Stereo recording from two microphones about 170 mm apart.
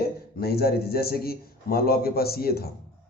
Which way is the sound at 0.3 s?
65° left (ahead or behind).